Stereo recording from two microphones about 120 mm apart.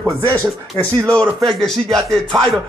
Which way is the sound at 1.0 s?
10° left (ahead or behind).